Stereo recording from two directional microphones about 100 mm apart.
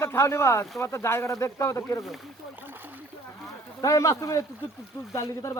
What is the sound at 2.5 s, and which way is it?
Splash, 20° right (ahead or behind).